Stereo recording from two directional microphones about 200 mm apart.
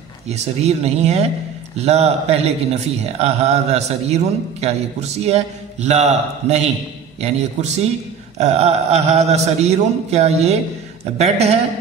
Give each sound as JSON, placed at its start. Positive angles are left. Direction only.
{"t": 0.3, "sound": "a man's voice", "side_deg": -35}